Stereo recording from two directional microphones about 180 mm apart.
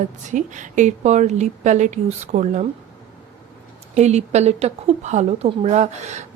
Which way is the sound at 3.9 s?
40° right (ahead or behind).